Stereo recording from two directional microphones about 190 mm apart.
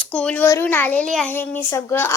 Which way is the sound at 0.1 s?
5° left (ahead or behind).